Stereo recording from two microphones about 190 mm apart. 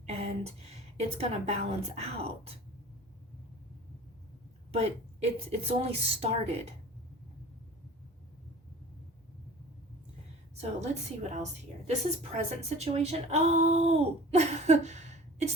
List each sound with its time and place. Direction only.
0.1 s a woman's voice: 35° right (ahead or behind)
4.7 s speech: 35° right (ahead or behind)
10.6 s speech: 40° right (ahead or behind)